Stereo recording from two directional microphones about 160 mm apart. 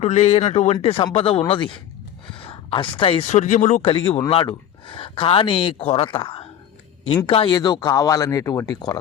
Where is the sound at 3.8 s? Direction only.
35° left (ahead or behind).